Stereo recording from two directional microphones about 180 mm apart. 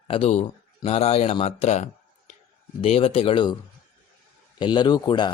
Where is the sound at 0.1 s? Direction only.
35° left (ahead or behind).